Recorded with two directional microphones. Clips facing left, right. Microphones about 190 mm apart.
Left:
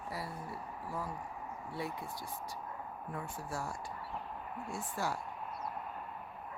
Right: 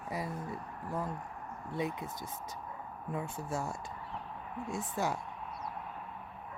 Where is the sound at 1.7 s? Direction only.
20° right (ahead or behind).